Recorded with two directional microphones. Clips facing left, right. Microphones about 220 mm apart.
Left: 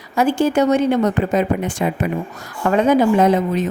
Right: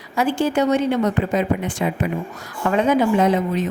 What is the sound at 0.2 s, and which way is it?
A woman's voice, 45° left (ahead or behind).